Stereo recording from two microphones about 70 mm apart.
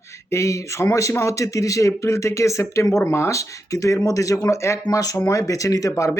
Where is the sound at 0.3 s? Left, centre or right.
Left.